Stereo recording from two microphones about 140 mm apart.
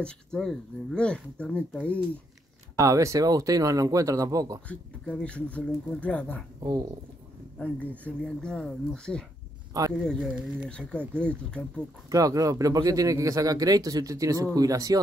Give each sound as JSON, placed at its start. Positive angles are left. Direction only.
{"t": 0.0, "sound": "speech", "side_deg": 5}
{"t": 2.8, "sound": "speech", "side_deg": -25}
{"t": 4.6, "sound": "speech", "side_deg": 10}
{"t": 6.6, "sound": "speech", "side_deg": -25}
{"t": 7.5, "sound": "speech", "side_deg": 10}
{"t": 10.0, "sound": "speech", "side_deg": -5}
{"t": 10.7, "sound": "speech", "side_deg": 10}
{"t": 12.1, "sound": "speech", "side_deg": -25}